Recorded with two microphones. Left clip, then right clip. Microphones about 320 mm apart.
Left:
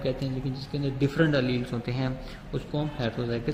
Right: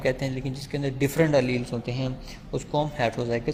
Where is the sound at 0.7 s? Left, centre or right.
Right.